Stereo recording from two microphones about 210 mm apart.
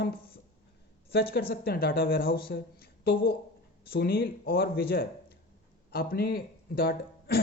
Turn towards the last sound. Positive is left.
turn(degrees=45)  # may be behind; listen again after turning